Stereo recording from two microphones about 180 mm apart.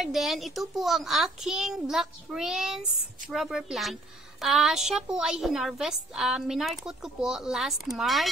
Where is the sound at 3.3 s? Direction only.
Centre (ahead or behind).